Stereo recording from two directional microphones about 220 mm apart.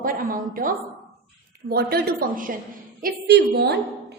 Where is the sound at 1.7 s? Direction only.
45° right (ahead or behind).